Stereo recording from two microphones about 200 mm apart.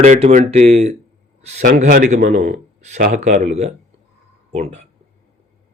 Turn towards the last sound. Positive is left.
turn(degrees=-35)  # may be behind; listen again after turning